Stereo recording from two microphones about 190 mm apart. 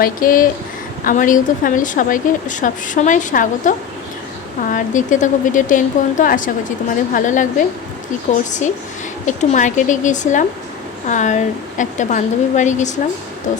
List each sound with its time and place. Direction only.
0.0 s speech: 45° left (ahead or behind)